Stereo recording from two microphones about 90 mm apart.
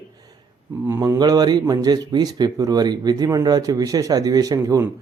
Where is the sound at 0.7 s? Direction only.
25° right (ahead or behind).